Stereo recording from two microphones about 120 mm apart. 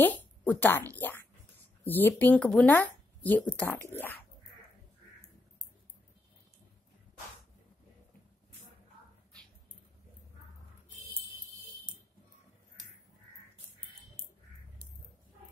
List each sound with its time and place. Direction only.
0.0 s a woman's voice: 15° left (ahead or behind)